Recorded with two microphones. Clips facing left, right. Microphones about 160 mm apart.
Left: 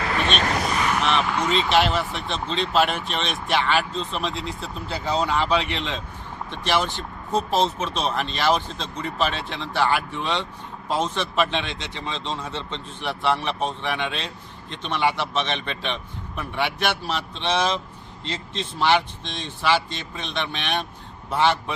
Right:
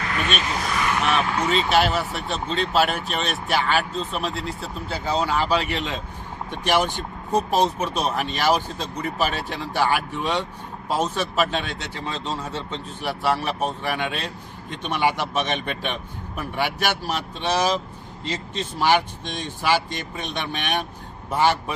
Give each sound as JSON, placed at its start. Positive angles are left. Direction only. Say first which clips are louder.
{"t": 0.9, "sound": "speech", "louder": "right 2 dB", "side_deg": 0}